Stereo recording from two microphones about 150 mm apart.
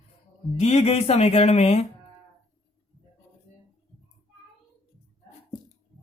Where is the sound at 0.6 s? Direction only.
45° left (ahead or behind).